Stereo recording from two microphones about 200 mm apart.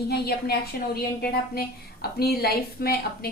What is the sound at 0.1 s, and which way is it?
A woman's voice, 50° left (ahead or behind).